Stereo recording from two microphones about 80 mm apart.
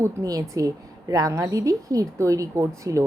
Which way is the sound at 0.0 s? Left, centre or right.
Right.